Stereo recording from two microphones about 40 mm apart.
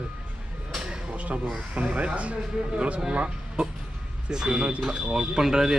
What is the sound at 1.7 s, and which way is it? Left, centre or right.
Speech, right.